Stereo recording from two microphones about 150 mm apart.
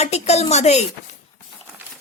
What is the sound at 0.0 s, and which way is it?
Speech, 45° left (ahead or behind).